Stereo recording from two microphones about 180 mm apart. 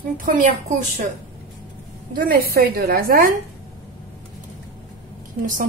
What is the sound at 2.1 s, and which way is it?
A woman's voice, 55° right (ahead or behind).